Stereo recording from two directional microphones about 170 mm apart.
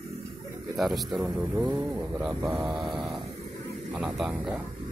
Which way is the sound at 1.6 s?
20° right (ahead or behind).